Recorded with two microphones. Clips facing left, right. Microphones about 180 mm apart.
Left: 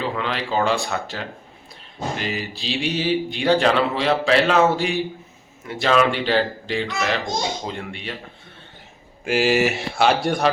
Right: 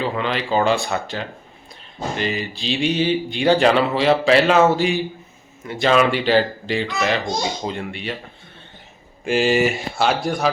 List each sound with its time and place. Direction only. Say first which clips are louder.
0.0 s speech: right 2 dB; centre (ahead or behind)
9.2 s speech: right 1 dB; 5° left (ahead or behind)